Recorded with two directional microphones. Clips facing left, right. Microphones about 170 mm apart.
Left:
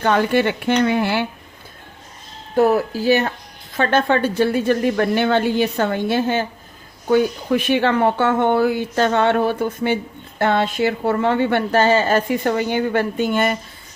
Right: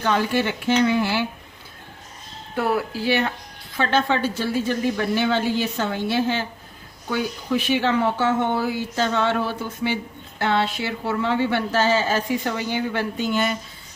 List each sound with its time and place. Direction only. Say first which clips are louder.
0.0 s speech: left 5 dB; 55° left (ahead or behind)
2.6 s a woman's voice: left 7 dB; 40° left (ahead or behind)